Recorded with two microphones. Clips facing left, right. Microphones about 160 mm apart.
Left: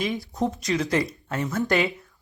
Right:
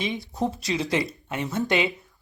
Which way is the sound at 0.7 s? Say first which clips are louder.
Left 2 dB; 20° right (ahead or behind).